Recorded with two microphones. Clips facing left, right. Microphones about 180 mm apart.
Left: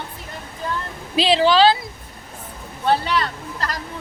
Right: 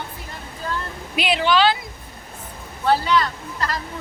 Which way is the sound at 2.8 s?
25° left (ahead or behind).